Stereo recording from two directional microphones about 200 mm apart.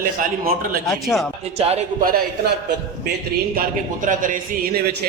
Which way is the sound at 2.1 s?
50° right (ahead or behind).